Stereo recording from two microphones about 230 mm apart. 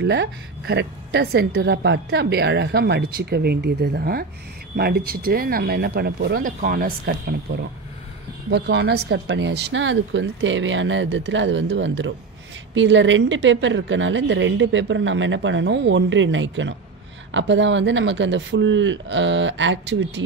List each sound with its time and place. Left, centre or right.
0.0 s a woman's voice: right